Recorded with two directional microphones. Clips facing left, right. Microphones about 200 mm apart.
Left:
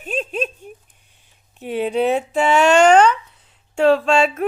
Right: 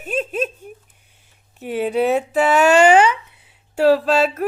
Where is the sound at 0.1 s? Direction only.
5° right (ahead or behind).